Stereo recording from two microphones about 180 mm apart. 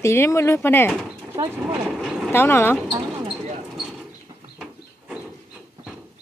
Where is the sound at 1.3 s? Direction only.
15° right (ahead or behind).